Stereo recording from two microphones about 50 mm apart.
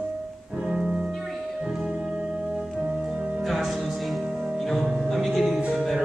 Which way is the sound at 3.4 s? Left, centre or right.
Centre.